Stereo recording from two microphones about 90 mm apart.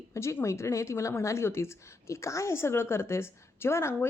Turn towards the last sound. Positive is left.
turn(degrees=30)  # may be behind; listen again after turning